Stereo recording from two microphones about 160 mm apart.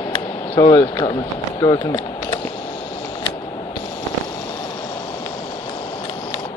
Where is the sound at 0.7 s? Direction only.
25° left (ahead or behind).